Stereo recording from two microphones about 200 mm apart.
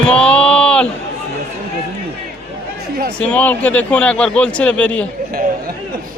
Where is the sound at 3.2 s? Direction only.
5° left (ahead or behind).